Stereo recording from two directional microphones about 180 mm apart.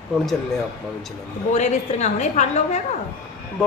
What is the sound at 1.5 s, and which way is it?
A woman's voice, 40° left (ahead or behind).